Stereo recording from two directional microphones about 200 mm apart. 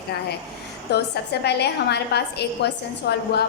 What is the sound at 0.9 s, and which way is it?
A woman's voice, 55° left (ahead or behind).